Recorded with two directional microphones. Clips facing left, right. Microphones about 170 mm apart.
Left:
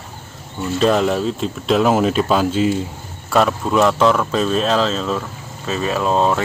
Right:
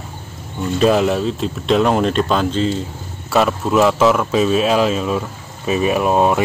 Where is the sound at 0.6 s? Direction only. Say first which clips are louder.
Right 2 dB; 5° right (ahead or behind).